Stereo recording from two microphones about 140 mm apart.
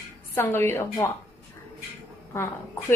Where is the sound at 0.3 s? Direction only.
15° left (ahead or behind).